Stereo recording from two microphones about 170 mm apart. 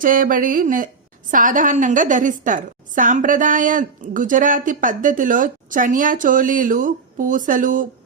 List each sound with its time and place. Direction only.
0.0 s a woman's voice: 55° right (ahead or behind)